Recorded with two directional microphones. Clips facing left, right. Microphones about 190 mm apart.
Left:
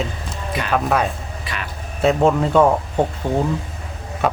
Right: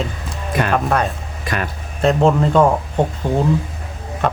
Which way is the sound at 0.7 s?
Centre (ahead or behind).